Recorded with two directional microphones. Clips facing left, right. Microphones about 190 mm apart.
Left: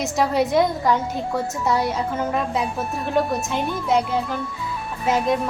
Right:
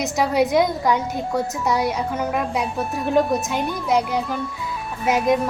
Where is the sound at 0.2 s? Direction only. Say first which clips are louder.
Right 1 dB; 5° right (ahead or behind).